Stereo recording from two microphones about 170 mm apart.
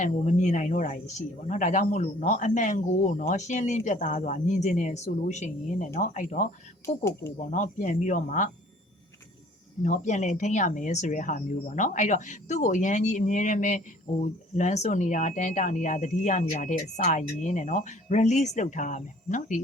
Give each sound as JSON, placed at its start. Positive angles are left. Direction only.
{"t": 0.0, "sound": "speech", "side_deg": 45}
{"t": 6.8, "sound": "speech", "side_deg": 15}
{"t": 7.3, "sound": "speech", "side_deg": 45}
{"t": 9.8, "sound": "speech", "side_deg": 45}